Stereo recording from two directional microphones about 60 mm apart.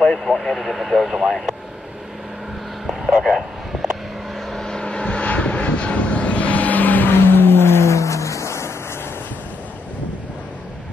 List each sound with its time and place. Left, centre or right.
0.0 s speech: centre
0.3 s speech: centre
2.9 s a sound: centre
4.5 s vehicle: centre; by 8.7 s left